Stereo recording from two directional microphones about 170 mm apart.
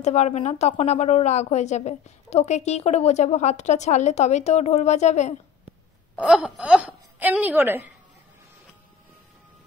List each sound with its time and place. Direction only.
0.0 s a woman's voice: 40° left (ahead or behind)
6.1 s a woman's voice: 5° right (ahead or behind)